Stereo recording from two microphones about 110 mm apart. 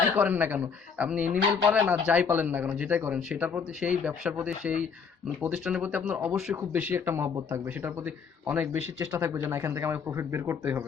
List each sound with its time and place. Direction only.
0.2 s speech: 15° right (ahead or behind)